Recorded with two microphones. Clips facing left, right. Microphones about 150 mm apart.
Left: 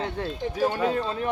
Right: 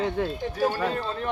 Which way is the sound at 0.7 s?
10° left (ahead or behind).